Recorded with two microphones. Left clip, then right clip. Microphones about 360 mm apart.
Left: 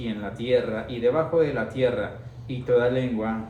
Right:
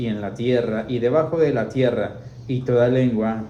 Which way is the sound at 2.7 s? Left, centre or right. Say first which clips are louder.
Right 3 dB; right.